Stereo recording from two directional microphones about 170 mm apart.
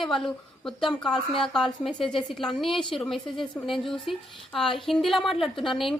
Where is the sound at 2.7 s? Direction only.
30° left (ahead or behind).